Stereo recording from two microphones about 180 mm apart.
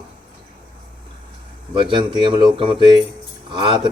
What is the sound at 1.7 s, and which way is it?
Speech, 25° right (ahead or behind).